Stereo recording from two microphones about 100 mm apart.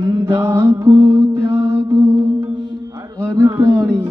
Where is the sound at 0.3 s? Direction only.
30° right (ahead or behind).